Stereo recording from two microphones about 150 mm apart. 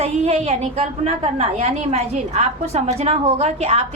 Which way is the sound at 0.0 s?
45° right (ahead or behind).